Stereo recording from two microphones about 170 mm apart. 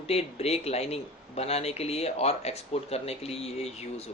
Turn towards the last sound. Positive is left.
turn(degrees=35)  # may be behind; listen again after turning